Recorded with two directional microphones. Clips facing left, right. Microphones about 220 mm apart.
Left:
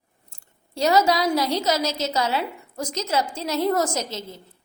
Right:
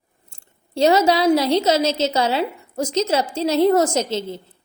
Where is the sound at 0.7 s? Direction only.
25° right (ahead or behind).